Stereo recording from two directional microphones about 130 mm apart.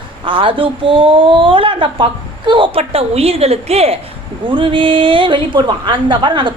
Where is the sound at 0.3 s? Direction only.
40° right (ahead or behind).